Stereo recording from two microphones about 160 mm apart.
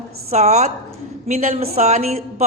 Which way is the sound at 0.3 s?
45° right (ahead or behind).